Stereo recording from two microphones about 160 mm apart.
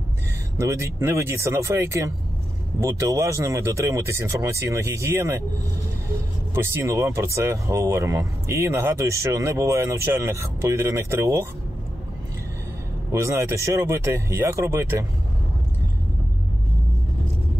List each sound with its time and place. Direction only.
0.6 s speech: 20° right (ahead or behind)
6.5 s speech: 15° right (ahead or behind)
13.1 s speech: 15° right (ahead or behind)